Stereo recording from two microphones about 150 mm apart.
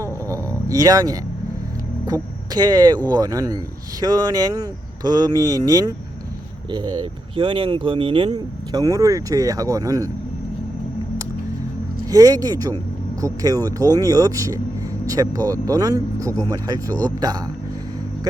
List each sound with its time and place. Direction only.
0.0 s a sound: 20° right (ahead or behind)
2.5 s speech: 25° right (ahead or behind)
12.1 s speech: 25° right (ahead or behind)